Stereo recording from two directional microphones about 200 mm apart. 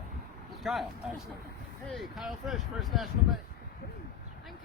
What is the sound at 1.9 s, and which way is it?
Speech, centre (ahead or behind).